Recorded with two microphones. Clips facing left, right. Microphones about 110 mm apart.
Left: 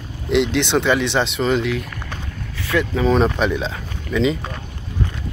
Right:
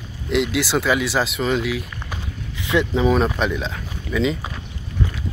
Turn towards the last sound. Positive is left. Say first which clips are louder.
# left 2 dB
turn(degrees=-5)  # may be behind; listen again after turning